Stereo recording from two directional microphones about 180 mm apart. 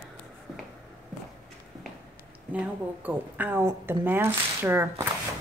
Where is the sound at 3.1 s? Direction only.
10° right (ahead or behind).